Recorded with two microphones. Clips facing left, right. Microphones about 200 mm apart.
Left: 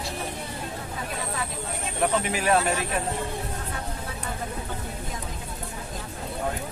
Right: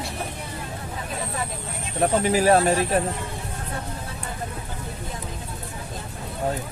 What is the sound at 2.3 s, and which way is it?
Speech, 35° right (ahead or behind).